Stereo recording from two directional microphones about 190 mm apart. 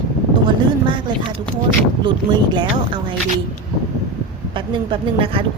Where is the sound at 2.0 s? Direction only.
25° right (ahead or behind).